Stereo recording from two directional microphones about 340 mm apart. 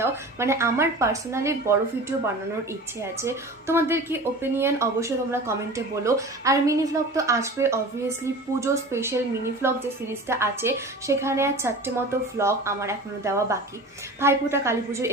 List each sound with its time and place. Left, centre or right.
0.0 s speech: centre